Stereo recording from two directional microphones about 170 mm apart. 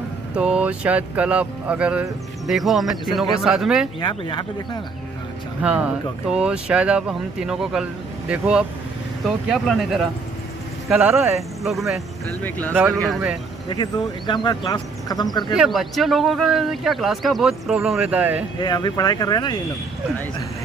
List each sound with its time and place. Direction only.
0.3 s speech: 5° right (ahead or behind)
4.0 s speech: 30° left (ahead or behind)
5.6 s speech: 5° right (ahead or behind)
11.6 s speech: centre (ahead or behind)
12.4 s speech: 10° left (ahead or behind)
12.7 s speech: 5° right (ahead or behind)
13.7 s speech: 25° left (ahead or behind)
15.5 s speech: centre (ahead or behind)
18.6 s speech: 25° left (ahead or behind)